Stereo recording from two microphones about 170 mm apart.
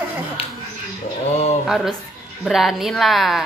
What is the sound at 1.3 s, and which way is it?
Speech, 40° left (ahead or behind).